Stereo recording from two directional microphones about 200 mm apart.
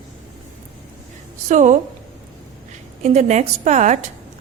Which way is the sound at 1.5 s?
35° right (ahead or behind).